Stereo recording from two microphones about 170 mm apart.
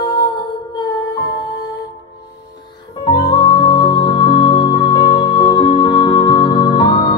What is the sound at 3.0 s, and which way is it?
Music, 25° left (ahead or behind).